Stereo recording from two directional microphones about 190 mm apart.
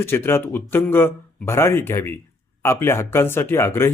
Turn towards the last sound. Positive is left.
turn(degrees=15)  # may be behind; listen again after turning